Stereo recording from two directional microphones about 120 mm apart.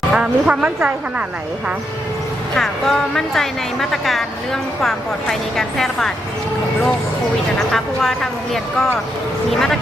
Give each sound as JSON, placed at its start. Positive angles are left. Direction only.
{"t": 0.1, "sound": "speech", "side_deg": -5}
{"t": 2.6, "sound": "speech", "side_deg": 5}
{"t": 7.7, "sound": "speech", "side_deg": 5}